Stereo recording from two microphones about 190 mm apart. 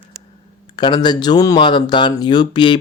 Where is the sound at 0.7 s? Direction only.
25° left (ahead or behind).